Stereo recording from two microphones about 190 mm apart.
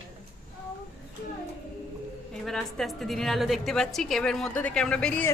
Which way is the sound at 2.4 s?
Centre (ahead or behind).